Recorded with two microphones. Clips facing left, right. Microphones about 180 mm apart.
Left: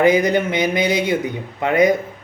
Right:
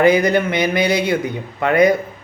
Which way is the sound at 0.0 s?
15° left (ahead or behind).